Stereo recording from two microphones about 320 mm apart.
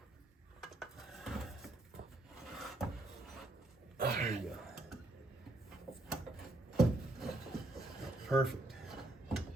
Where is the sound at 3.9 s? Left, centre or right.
Right.